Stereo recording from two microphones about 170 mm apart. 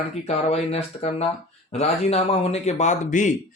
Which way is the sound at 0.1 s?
40° left (ahead or behind).